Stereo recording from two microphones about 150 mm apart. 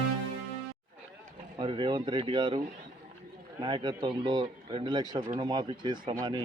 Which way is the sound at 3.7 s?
30° right (ahead or behind).